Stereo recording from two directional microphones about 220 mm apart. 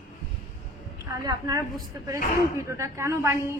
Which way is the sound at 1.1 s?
15° right (ahead or behind).